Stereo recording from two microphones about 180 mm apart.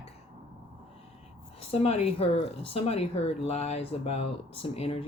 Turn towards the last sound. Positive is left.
turn(degrees=35)  # may be behind; listen again after turning